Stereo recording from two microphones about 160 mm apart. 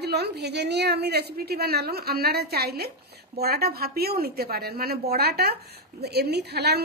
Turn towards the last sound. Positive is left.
turn(degrees=-90)